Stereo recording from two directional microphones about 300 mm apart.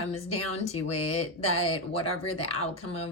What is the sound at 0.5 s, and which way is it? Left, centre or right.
Speech, left.